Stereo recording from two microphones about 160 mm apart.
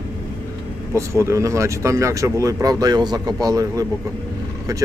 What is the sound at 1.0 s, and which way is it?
Speech, 15° right (ahead or behind).